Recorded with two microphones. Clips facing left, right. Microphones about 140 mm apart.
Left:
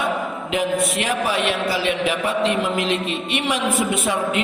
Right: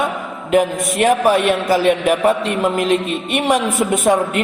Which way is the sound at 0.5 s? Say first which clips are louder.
Right 6 dB; 50° right (ahead or behind).